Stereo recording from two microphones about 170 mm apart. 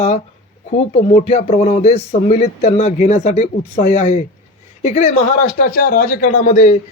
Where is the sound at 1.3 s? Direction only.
40° left (ahead or behind).